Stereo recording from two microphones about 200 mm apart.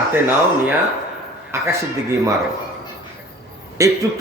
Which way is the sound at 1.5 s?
15° right (ahead or behind).